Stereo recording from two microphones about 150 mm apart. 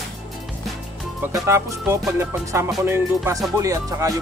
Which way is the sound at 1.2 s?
15° right (ahead or behind).